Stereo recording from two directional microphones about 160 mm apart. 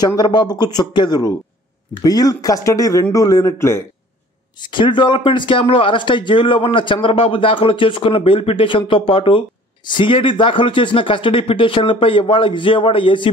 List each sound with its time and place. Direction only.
0.0 s speech: 25° left (ahead or behind)
4.6 s speech: 30° left (ahead or behind)